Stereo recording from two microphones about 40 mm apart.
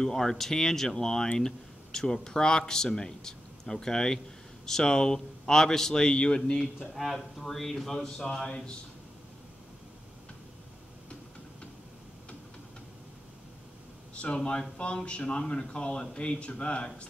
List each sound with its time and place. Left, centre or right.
0.0 s a man's voice: centre
6.6 s a man's voice: centre
8.5 s speech: left
14.1 s speech: left